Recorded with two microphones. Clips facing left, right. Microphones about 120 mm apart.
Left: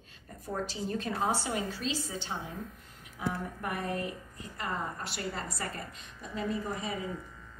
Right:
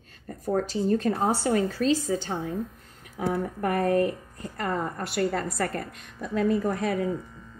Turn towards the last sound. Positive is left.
turn(degrees=-70)  # may be behind; listen again after turning